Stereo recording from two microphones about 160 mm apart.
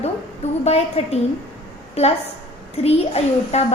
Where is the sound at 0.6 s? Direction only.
40° left (ahead or behind).